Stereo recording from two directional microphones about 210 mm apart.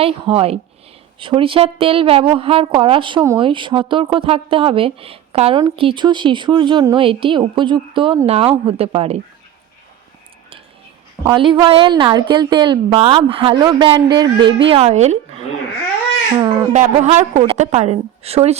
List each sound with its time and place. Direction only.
0.0 s a woman's voice: 25° right (ahead or behind)
11.3 s a woman's voice: 25° right (ahead or behind)
16.4 s a woman's voice: 20° right (ahead or behind)
16.7 s a woman's voice: 35° right (ahead or behind)